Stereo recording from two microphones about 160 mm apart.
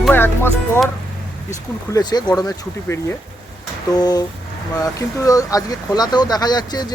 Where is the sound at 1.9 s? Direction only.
25° left (ahead or behind).